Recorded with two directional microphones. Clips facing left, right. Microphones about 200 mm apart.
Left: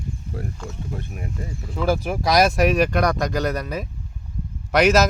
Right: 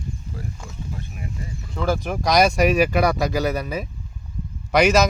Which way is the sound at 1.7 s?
5° left (ahead or behind).